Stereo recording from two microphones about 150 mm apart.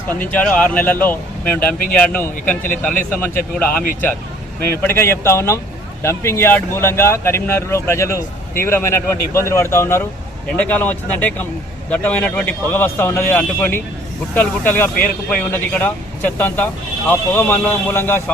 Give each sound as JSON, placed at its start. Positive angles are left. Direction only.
{"t": 0.1, "sound": "speech", "side_deg": 10}